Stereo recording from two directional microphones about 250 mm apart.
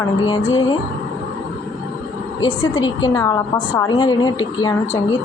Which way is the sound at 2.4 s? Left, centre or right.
Left.